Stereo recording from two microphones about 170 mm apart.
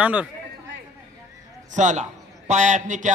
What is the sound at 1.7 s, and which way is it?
A man's voice, 45° right (ahead or behind).